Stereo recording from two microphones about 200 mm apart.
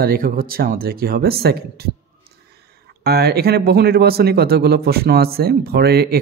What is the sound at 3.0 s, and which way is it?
Speech, 50° right (ahead or behind).